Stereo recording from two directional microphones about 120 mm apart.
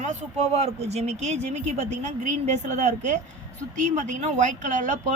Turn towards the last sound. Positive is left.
turn(degrees=-90)